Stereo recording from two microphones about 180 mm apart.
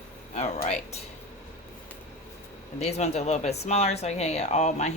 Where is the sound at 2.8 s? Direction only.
35° left (ahead or behind).